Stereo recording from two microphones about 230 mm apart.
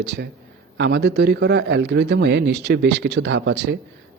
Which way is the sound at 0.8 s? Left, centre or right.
Right.